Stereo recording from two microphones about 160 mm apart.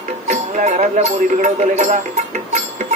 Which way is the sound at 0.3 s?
50° right (ahead or behind).